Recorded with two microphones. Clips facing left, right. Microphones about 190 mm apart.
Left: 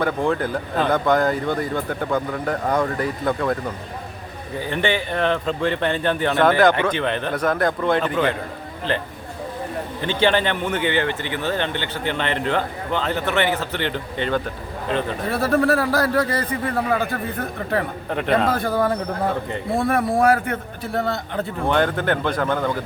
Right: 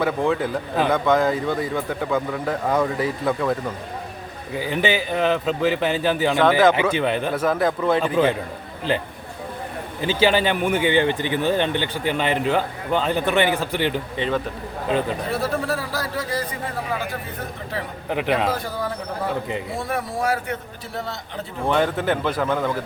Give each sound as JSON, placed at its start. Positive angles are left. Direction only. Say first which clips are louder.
{"t": 0.0, "sound": "speech", "louder": "even", "side_deg": 0}
{"t": 10.0, "sound": "speech", "louder": "right 1 dB", "side_deg": -5}
{"t": 15.3, "sound": "a man's voice", "louder": "left 5 dB", "side_deg": 60}
{"t": 18.1, "sound": "speech", "louder": "left 1 dB", "side_deg": -5}
{"t": 18.5, "sound": "a man's voice", "louder": "left 6 dB", "side_deg": 55}
{"t": 21.7, "sound": "speech", "louder": "even", "side_deg": 0}